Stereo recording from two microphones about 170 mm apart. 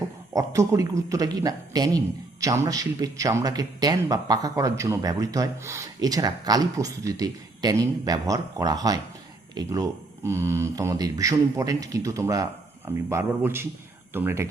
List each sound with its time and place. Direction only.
0.3 s speech: 20° right (ahead or behind)